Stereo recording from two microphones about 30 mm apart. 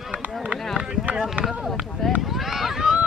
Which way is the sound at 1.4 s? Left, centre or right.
Right.